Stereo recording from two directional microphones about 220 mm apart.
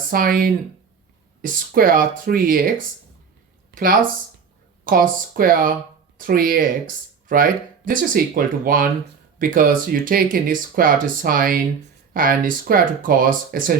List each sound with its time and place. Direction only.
0.1 s speech: 40° right (ahead or behind)